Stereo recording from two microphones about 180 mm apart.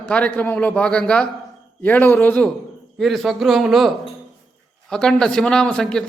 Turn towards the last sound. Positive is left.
turn(degrees=5)  # may be behind; listen again after turning